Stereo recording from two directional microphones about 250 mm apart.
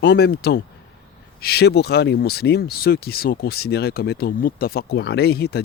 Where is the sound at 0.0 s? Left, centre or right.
Left.